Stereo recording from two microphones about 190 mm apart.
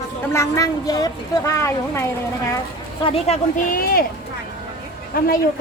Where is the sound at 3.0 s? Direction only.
30° left (ahead or behind).